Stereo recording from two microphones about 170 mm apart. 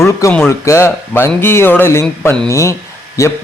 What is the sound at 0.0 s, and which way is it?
A man's voice, 15° left (ahead or behind).